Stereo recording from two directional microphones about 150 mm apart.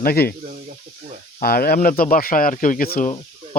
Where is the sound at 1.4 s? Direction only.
85° left.